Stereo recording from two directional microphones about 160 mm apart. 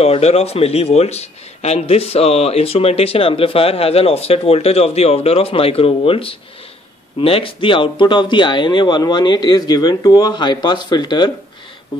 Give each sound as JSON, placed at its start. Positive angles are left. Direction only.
{"t": 0.0, "sound": "speech", "side_deg": 40}